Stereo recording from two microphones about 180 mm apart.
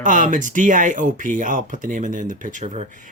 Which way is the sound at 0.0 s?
45° right (ahead or behind).